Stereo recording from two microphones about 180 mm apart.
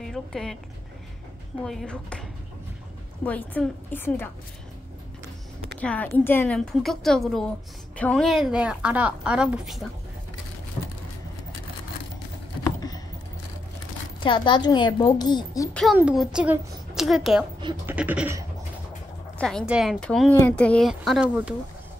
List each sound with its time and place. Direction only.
0.0 s speech: 5° left (ahead or behind)
1.6 s a woman's voice: 5° left (ahead or behind)
3.3 s a woman's voice: 10° left (ahead or behind)
5.8 s a woman's voice: 5° left (ahead or behind)
12.6 s computer keyboard: 20° left (ahead or behind)
14.2 s a woman's voice: 25° left (ahead or behind)
15.7 s a woman's voice: centre (ahead or behind)
16.0 s a sound: 5° right (ahead or behind)
16.3 s a woman's voice: 5° right (ahead or behind)
17.8 s a sound: 10° right (ahead or behind)
19.3 s a woman's voice: 5° left (ahead or behind)